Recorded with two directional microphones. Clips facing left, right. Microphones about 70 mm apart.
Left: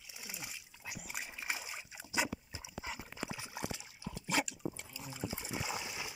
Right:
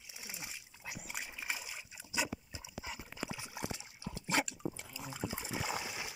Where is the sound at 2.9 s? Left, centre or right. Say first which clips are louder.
Even; left.